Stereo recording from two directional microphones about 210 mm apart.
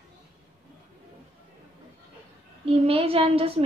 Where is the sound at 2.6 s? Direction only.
25° right (ahead or behind).